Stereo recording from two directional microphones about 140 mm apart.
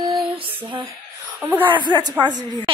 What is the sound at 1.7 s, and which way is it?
A woman's voice, 35° right (ahead or behind).